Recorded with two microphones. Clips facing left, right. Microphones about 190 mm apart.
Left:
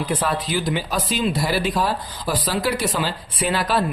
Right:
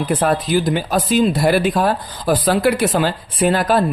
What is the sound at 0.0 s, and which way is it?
Speech, 55° right (ahead or behind).